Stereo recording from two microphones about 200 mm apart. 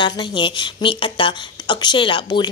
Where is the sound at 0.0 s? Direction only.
25° left (ahead or behind).